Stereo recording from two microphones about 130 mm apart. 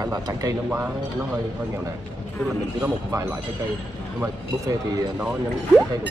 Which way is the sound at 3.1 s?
20° right (ahead or behind).